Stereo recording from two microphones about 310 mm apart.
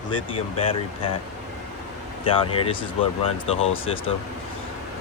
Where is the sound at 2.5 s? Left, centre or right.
Centre.